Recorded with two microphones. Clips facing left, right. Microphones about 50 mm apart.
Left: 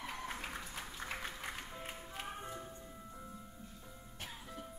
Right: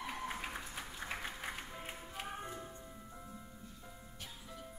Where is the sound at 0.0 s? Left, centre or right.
Centre.